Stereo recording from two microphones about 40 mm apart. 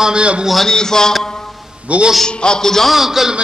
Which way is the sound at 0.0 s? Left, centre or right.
Right.